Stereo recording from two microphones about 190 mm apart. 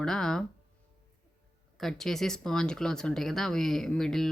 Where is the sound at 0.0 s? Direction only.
5° left (ahead or behind).